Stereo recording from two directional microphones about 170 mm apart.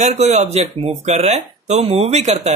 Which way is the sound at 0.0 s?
40° right (ahead or behind).